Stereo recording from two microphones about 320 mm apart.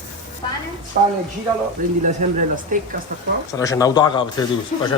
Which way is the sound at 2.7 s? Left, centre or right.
Right.